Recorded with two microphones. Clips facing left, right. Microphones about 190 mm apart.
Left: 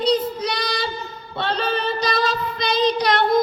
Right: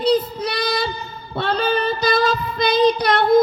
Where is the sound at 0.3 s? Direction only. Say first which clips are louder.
Right 3 dB; 55° right (ahead or behind).